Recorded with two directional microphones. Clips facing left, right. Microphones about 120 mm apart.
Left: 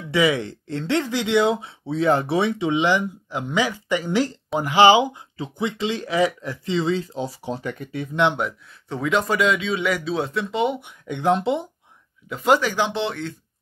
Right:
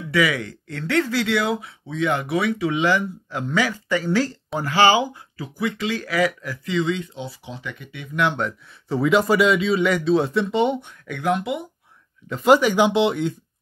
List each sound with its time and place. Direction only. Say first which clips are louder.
0.1 s speech: left 1 dB; 25° left (ahead or behind)
8.8 s speech: right 4 dB; 5° right (ahead or behind)
10.8 s speech: left 2 dB; 20° left (ahead or behind)
12.3 s speech: right 3 dB; centre (ahead or behind)
12.5 s speech: right 5 dB; 10° right (ahead or behind)